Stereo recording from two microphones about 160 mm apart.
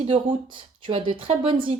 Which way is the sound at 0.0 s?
35° right (ahead or behind).